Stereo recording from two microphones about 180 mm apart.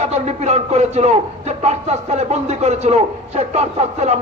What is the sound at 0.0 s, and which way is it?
Speech, 35° right (ahead or behind).